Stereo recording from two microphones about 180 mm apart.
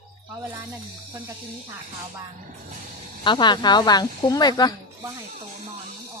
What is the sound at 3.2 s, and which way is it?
Speech, 25° left (ahead or behind).